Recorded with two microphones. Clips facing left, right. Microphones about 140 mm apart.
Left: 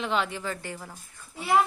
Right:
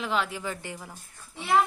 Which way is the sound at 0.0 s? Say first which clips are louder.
Left 1 dB; centre (ahead or behind).